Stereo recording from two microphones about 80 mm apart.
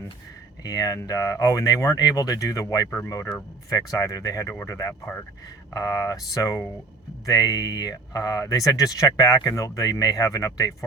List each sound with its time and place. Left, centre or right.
0.6 s speech: left